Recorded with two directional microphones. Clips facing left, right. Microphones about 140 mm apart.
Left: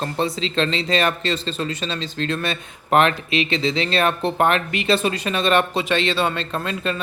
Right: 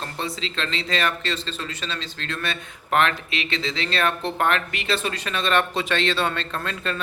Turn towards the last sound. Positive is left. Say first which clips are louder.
# left 4 dB
turn(degrees=10)  # may be behind; listen again after turning